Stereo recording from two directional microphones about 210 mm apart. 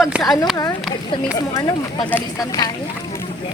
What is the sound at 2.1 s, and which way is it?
Speech, 15° left (ahead or behind).